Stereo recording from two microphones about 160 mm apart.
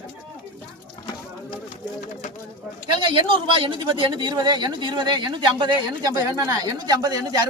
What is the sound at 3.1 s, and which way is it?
Speech, 30° right (ahead or behind).